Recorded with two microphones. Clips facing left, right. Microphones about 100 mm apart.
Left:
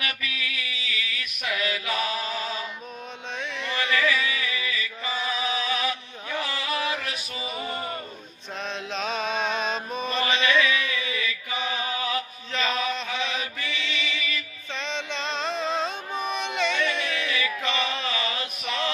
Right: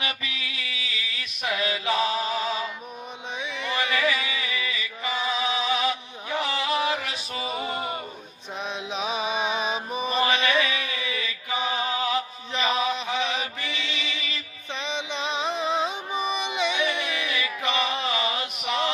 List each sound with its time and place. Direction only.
0.0 s a sound: 25° right (ahead or behind)
0.9 s music: 25° right (ahead or behind)
3.4 s a sound: 15° right (ahead or behind)
7.3 s music: 30° right (ahead or behind)
7.6 s music: 15° right (ahead or behind)
8.6 s mantra: 15° right (ahead or behind)
11.5 s chant: 20° right (ahead or behind)
14.8 s music: 15° right (ahead or behind)